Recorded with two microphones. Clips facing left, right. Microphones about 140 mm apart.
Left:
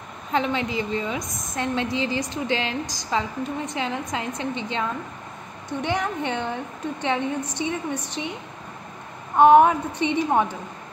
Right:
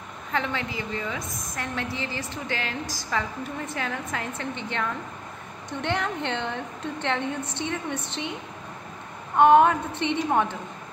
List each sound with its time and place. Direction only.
0.3 s a woman's voice: 20° left (ahead or behind)
9.4 s a woman's voice: 15° left (ahead or behind)